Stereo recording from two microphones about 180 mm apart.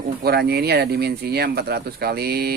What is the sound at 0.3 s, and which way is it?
Speech, 65° right (ahead or behind).